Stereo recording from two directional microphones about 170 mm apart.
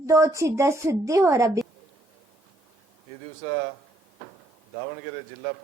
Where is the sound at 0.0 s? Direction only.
15° right (ahead or behind).